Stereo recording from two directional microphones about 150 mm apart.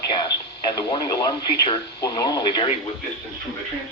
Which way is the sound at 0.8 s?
30° left (ahead or behind).